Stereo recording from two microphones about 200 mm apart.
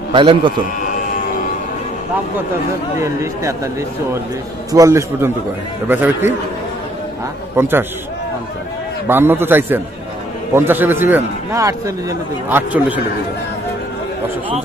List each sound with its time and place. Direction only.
0.1 s a man's voice: 25° right (ahead or behind)
3.0 s a man's voice: 15° right (ahead or behind)
4.7 s a man's voice: 15° right (ahead or behind)
7.5 s a man's voice: 10° right (ahead or behind)
9.0 s a man's voice: 10° right (ahead or behind)